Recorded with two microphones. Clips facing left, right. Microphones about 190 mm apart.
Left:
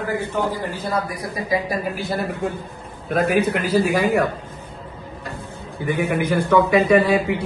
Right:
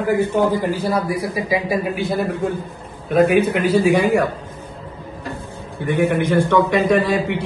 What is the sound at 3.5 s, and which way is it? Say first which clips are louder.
Speech: right 3 dB; centre (ahead or behind).